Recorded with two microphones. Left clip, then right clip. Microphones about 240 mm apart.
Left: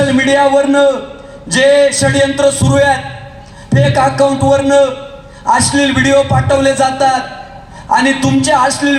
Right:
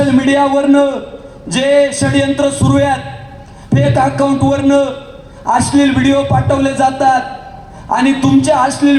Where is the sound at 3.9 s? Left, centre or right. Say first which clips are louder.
Left 3 dB; left.